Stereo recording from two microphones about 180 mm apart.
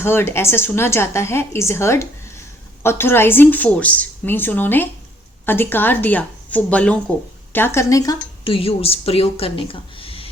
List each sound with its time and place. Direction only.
0.0 s a woman's voice: 15° left (ahead or behind)
8.4 s speech: 30° left (ahead or behind)